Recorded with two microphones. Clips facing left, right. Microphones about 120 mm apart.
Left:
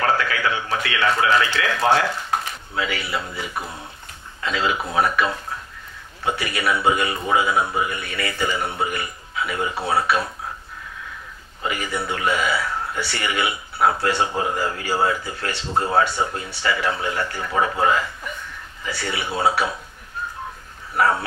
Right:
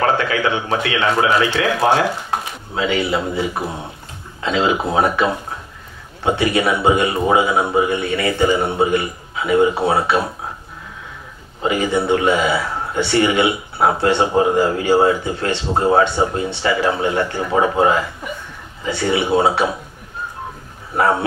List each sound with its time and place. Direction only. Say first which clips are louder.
0.0 s speech: right 4 dB; 25° right (ahead or behind)
11.6 s speech: right 8 dB; 25° right (ahead or behind)
20.9 s speech: right 3 dB; 25° right (ahead or behind)